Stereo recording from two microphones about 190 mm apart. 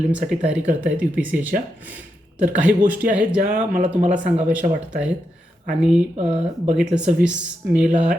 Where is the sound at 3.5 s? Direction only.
40° right (ahead or behind).